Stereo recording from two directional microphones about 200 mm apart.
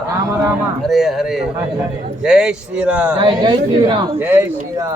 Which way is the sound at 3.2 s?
20° right (ahead or behind).